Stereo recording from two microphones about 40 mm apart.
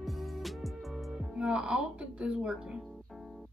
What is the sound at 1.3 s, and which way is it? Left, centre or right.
Speech, right.